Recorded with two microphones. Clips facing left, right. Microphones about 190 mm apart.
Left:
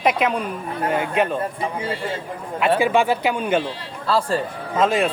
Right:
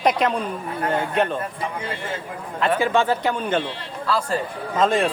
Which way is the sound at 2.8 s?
10° left (ahead or behind).